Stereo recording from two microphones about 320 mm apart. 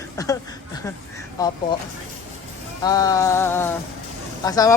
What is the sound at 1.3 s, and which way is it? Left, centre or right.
Speech, centre.